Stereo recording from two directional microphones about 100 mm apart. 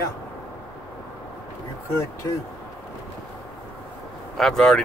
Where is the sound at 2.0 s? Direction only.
30° left (ahead or behind).